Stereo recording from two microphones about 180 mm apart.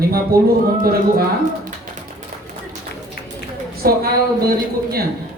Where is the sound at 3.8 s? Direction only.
55° right (ahead or behind).